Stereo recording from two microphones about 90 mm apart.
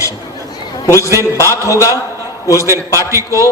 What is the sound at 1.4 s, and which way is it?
Speech, 35° right (ahead or behind).